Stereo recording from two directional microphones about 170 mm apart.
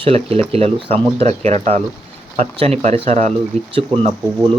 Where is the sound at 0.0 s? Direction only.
35° right (ahead or behind).